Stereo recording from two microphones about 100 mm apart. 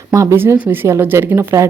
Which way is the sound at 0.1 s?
30° right (ahead or behind).